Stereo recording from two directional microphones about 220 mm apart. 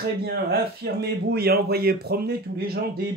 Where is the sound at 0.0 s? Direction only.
45° right (ahead or behind).